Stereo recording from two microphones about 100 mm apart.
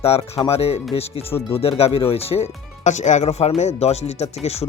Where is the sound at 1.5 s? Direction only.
75° left (ahead or behind).